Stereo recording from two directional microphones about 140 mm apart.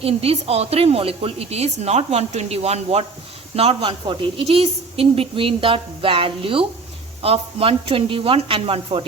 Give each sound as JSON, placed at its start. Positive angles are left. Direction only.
{"t": 0.0, "sound": "a woman's voice", "side_deg": -45}